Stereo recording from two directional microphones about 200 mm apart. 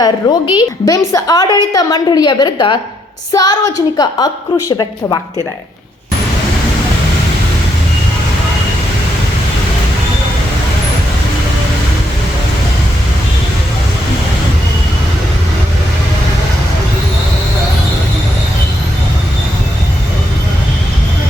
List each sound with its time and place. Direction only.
0.0 s a woman's voice: 20° left (ahead or behind)